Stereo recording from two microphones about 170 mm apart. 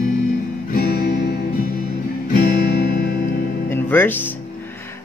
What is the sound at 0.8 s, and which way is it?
Music, 65° left (ahead or behind).